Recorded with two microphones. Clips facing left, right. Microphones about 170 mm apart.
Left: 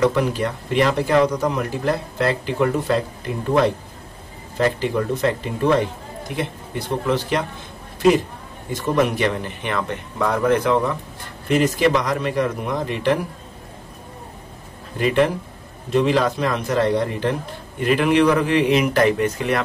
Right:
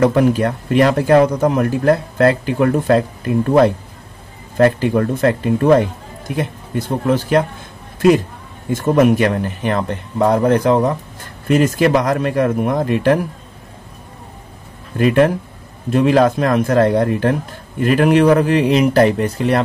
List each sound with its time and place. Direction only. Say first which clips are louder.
0.0 s speech: right 6 dB; 50° right (ahead or behind)
4.6 s speech: right 7 dB; 55° right (ahead or behind)
7.1 s speech: right 7 dB; 45° right (ahead or behind)
8.7 s speech: right 7 dB; 45° right (ahead or behind)
11.4 s speech: right 4 dB; 50° right (ahead or behind)
15.0 s speech: right 5 dB; 50° right (ahead or behind); by 19.6 s 35° right (ahead or behind)